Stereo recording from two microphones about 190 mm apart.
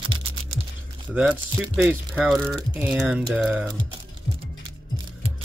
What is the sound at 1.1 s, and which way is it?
Speech, 5° right (ahead or behind).